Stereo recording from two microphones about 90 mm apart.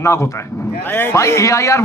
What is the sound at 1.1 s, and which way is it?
Speech, 35° left (ahead or behind).